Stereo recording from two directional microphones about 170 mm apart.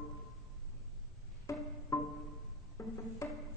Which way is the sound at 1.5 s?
20° left (ahead or behind).